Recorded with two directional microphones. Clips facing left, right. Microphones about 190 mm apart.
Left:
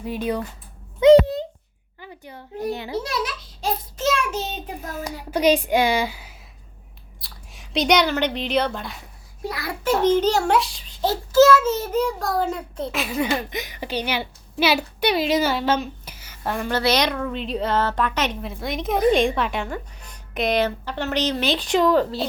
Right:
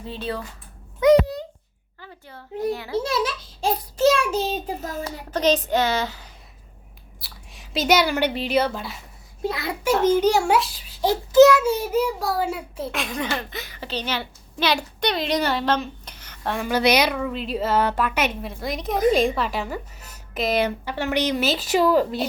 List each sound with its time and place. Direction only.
0.0 s speech: 15° left (ahead or behind)
0.9 s a sound: 25° left (ahead or behind)
2.0 s a child's voice: 15° left (ahead or behind)
3.6 s child singing: 30° right (ahead or behind)
4.9 s speech: 10° left (ahead or behind)
7.2 s speech: centre (ahead or behind)
9.4 s a child's voice: 25° right (ahead or behind)
9.8 s a child's voice: 10° right (ahead or behind)
11.0 s a child's voice: 15° right (ahead or behind); by 16.7 s centre (ahead or behind)
16.7 s a child's voice: 10° right (ahead or behind)